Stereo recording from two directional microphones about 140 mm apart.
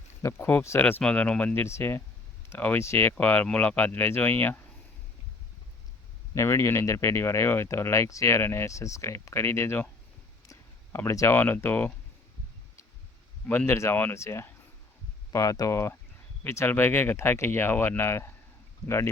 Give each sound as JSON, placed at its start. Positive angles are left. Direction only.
{"t": 0.2, "sound": "speech", "side_deg": 15}
{"t": 6.3, "sound": "speech", "side_deg": 20}
{"t": 13.5, "sound": "speech", "side_deg": 15}